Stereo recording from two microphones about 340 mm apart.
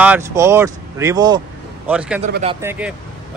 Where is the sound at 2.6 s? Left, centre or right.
Centre.